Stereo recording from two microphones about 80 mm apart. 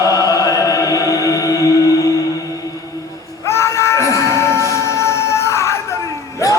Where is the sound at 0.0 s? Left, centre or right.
Left.